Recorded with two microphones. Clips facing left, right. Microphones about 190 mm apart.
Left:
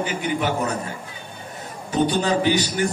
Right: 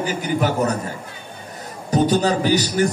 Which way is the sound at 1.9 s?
40° right (ahead or behind).